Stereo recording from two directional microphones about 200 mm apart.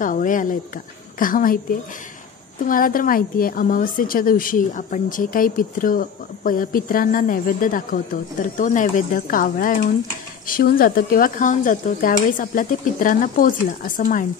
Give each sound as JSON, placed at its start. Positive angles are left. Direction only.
{"t": 0.0, "sound": "a woman's voice", "side_deg": 40}
{"t": 2.6, "sound": "a woman's voice", "side_deg": 45}